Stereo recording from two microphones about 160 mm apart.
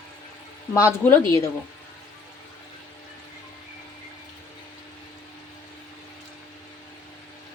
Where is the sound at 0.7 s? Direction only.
15° left (ahead or behind).